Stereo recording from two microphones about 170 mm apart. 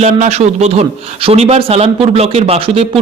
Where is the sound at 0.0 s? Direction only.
40° right (ahead or behind).